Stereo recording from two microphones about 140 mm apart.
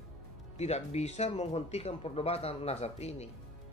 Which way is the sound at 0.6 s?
50° left (ahead or behind).